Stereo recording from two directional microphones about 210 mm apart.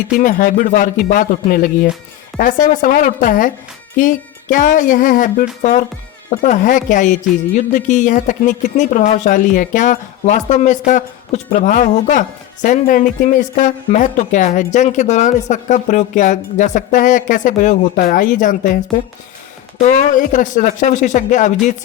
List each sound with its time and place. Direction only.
0.2 s speech: 40° left (ahead or behind)
2.3 s a woman's voice: 5° left (ahead or behind)
2.6 s speech: 40° left (ahead or behind)
19.8 s speech: 35° left (ahead or behind)